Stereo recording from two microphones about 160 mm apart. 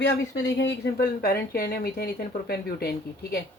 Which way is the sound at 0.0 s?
90° left.